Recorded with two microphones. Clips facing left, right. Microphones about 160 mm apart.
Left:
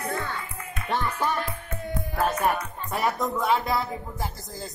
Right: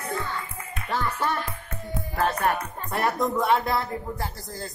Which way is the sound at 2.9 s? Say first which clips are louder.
Right 2 dB; centre (ahead or behind).